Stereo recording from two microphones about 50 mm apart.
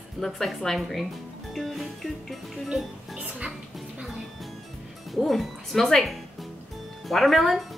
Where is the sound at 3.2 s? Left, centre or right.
Right.